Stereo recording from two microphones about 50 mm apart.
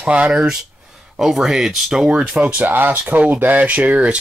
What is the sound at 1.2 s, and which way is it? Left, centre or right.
Speech, centre.